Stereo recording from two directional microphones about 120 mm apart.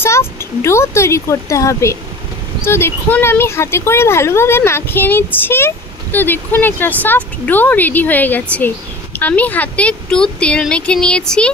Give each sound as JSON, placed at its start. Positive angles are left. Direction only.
{"t": 0.0, "sound": "speech", "side_deg": 20}